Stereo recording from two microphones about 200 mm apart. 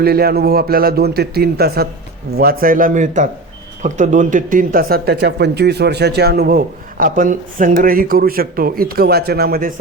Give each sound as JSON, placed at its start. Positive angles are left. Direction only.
{"t": 0.0, "sound": "speech", "side_deg": -50}